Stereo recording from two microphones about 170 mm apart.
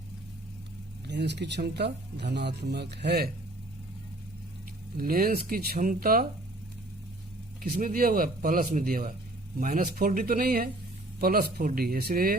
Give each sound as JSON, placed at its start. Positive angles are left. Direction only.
{"t": 1.0, "sound": "speech", "side_deg": -85}
{"t": 4.9, "sound": "speech", "side_deg": -55}
{"t": 7.6, "sound": "speech", "side_deg": -55}